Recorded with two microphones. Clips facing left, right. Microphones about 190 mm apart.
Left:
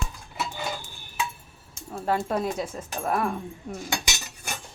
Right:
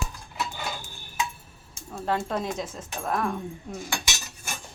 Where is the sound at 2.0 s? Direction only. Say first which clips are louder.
Left 2 dB; 10° left (ahead or behind).